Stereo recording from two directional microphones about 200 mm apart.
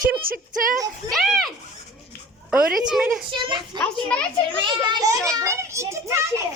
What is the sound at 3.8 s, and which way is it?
Speech, 5° left (ahead or behind).